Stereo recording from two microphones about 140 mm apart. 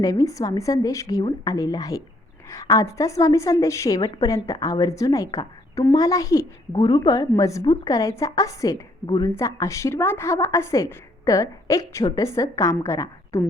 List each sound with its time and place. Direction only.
0.0 s a woman's voice: 25° left (ahead or behind)